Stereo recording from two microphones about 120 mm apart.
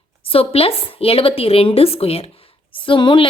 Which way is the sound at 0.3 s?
50° left (ahead or behind).